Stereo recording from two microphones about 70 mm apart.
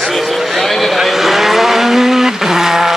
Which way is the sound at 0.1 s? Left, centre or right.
Centre.